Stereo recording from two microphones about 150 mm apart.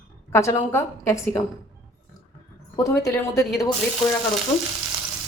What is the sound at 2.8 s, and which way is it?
Speech, 20° left (ahead or behind).